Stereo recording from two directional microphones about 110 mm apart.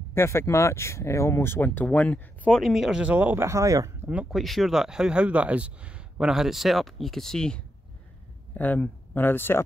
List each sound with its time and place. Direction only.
0.1 s speech: 25° left (ahead or behind)
2.7 s speech: 5° right (ahead or behind); by 3.9 s 30° right (ahead or behind)
4.1 s speech: 10° right (ahead or behind)
4.4 s speech: centre (ahead or behind); by 9.6 s 20° left (ahead or behind)